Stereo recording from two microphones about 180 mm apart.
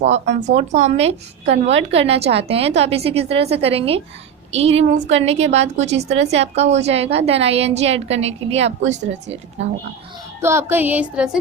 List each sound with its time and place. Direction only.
0.0 s a woman's voice: 40° right (ahead or behind)
10.4 s music: 15° right (ahead or behind)